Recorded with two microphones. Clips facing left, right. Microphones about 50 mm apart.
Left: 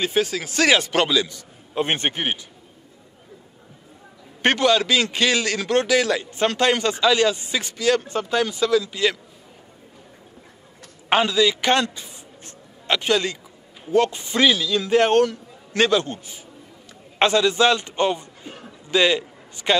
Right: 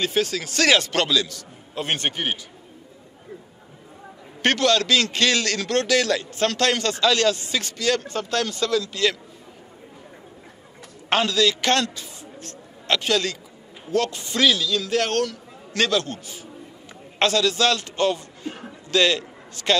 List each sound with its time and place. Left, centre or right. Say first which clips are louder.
0.0 s a man's voice: left 1 dB; centre
4.4 s a man's voice: left 2 dB; centre
11.1 s a man's voice: left 2 dB; centre